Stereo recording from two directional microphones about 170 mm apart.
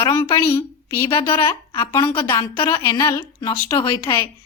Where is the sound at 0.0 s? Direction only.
15° left (ahead or behind).